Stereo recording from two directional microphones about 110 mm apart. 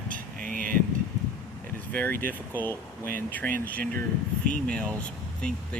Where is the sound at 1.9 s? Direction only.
15° left (ahead or behind).